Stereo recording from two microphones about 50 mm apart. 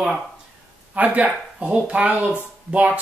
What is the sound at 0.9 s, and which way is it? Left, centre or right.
Speech, right.